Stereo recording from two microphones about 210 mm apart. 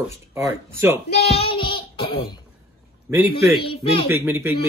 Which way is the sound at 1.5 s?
25° left (ahead or behind).